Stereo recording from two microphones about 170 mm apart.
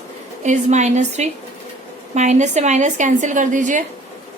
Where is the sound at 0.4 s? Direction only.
45° right (ahead or behind).